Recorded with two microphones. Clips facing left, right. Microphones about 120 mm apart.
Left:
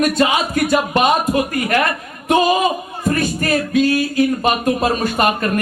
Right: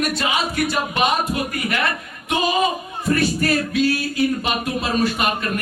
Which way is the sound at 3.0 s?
45° left (ahead or behind).